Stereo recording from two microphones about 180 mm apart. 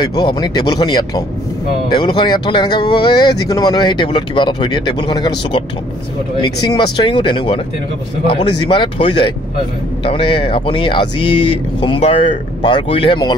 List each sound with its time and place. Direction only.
0.0 s speech: 25° left (ahead or behind)
6.4 s speech: 25° left (ahead or behind)